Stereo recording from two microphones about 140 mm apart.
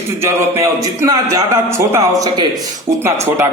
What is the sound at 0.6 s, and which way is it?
A man's voice, 20° right (ahead or behind).